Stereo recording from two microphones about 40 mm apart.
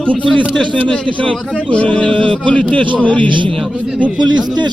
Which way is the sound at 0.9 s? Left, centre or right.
Left.